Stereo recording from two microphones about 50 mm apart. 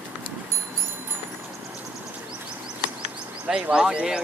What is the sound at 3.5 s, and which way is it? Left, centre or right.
Speech, centre.